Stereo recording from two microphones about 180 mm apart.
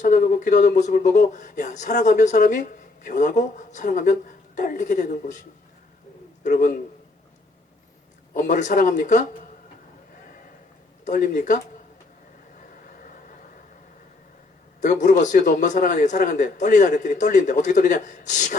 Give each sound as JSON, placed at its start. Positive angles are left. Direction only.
{"t": 0.0, "sound": "speech", "side_deg": 50}
{"t": 6.4, "sound": "a man's voice", "side_deg": 45}
{"t": 8.3, "sound": "speech", "side_deg": 45}
{"t": 11.0, "sound": "speech", "side_deg": 45}
{"t": 14.8, "sound": "speech", "side_deg": 40}